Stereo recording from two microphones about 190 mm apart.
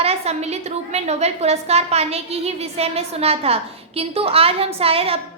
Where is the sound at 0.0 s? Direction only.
35° right (ahead or behind).